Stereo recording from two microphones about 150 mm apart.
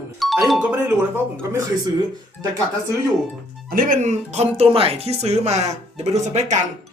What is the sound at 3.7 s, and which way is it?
Speech, 65° right (ahead or behind).